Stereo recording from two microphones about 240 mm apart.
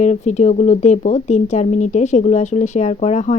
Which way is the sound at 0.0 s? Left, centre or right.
Left.